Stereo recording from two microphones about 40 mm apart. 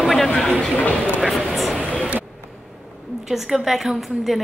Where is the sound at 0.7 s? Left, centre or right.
Left.